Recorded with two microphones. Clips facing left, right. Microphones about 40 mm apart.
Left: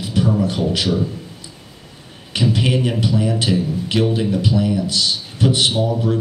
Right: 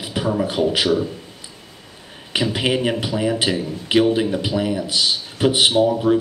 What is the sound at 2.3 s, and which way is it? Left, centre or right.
A man's voice, centre.